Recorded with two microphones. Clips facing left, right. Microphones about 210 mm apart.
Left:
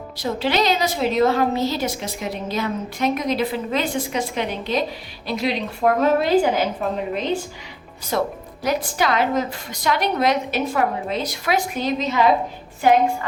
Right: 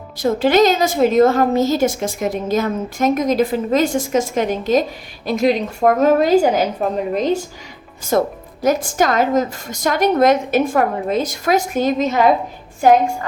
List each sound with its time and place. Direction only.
0.2 s a woman's voice: 50° right (ahead or behind)